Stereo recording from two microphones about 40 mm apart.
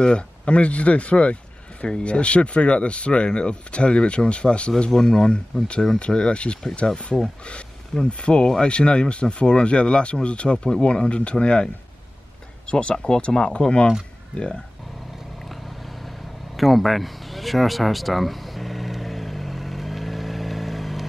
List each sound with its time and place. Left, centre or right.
0.0 s speech: left
8.0 s speech: left
12.7 s speech: centre
16.5 s a sound: centre